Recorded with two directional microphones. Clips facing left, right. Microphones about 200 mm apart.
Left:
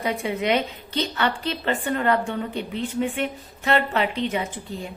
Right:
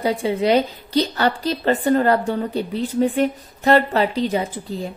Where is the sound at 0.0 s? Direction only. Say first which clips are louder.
Right 5 dB; 30° right (ahead or behind).